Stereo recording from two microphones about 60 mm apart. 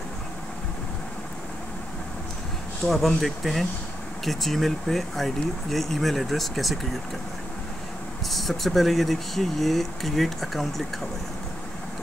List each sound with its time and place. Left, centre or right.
2.9 s speech: centre
8.3 s speech: centre